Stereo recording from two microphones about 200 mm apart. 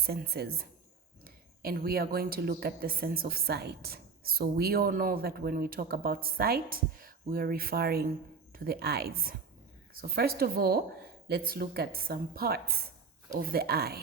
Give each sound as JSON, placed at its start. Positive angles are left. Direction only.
{"t": 0.0, "sound": "speech", "side_deg": -50}